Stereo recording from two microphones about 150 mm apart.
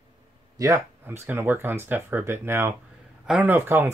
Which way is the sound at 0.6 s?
20° right (ahead or behind).